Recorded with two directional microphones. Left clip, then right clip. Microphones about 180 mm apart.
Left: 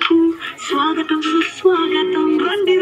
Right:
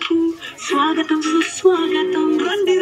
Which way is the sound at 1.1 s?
50° right (ahead or behind).